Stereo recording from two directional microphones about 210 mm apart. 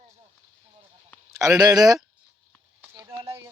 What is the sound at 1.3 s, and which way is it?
Speech, 15° right (ahead or behind).